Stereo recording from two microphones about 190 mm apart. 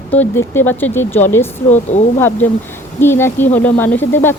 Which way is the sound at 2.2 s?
10° left (ahead or behind).